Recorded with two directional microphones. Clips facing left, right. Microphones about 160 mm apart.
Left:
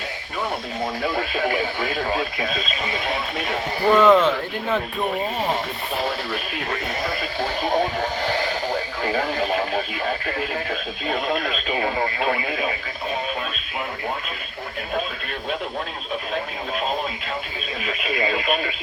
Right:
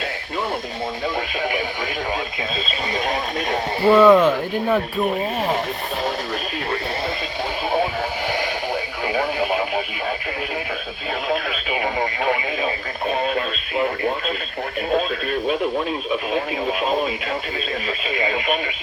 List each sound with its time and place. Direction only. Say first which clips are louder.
1.0 s speech: left 1 dB; 20° right (ahead or behind)
3.8 s speech: right 3 dB; 10° right (ahead or behind)
8.3 s radio: even; 15° right (ahead or behind)
11.8 s speech: right 1 dB; 15° right (ahead or behind)